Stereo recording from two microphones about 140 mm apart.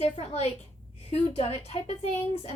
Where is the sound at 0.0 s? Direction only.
50° left (ahead or behind).